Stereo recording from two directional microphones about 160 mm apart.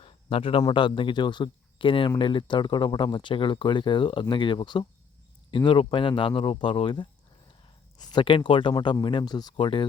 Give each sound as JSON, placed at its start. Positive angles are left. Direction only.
{"t": 0.0, "sound": "speech", "side_deg": 35}
{"t": 8.1, "sound": "speech", "side_deg": 30}